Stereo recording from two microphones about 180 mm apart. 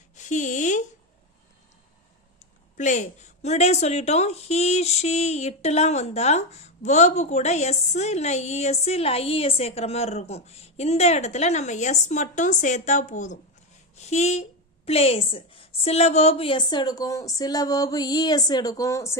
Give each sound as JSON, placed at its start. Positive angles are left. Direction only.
{"t": 0.2, "sound": "speech", "side_deg": 45}
{"t": 2.7, "sound": "a woman's voice", "side_deg": 40}